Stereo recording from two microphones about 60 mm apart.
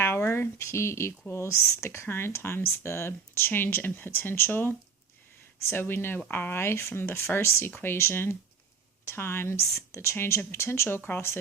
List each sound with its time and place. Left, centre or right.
0.0 s speech: left